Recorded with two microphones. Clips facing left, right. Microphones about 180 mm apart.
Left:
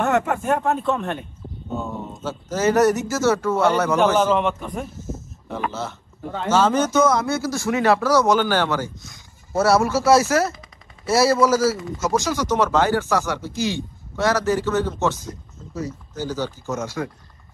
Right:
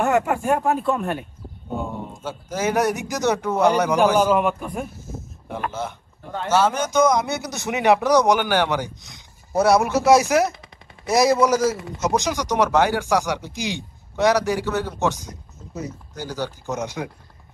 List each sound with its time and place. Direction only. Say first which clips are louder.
0.0 s speech: right 1 dB; centre (ahead or behind); by 17.1 s 15° right (ahead or behind)